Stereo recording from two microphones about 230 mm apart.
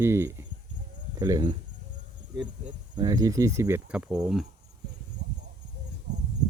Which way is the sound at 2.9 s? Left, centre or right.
Centre.